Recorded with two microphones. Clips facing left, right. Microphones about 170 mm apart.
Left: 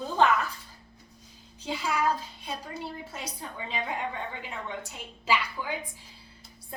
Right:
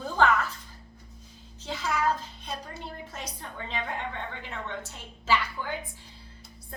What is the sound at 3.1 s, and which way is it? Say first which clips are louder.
A woman's voice: left 1 dB; 10° left (ahead or behind).